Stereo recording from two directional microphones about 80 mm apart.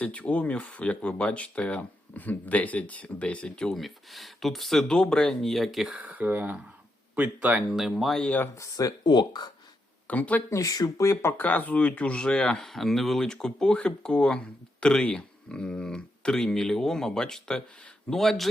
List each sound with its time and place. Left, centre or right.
0.0 s speech: centre
5.9 s speech: centre
7.7 s speech: centre
8.5 s speech: left
9.0 s speech: left
10.1 s speech: centre
10.5 s speech: left
10.9 s speech: left
11.4 s speech: centre